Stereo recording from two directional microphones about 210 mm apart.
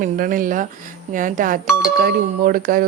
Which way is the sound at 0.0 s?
40° right (ahead or behind).